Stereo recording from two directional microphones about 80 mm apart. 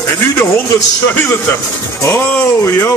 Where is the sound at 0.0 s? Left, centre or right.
Left.